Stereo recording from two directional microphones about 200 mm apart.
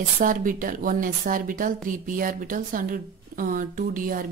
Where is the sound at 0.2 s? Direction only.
40° right (ahead or behind).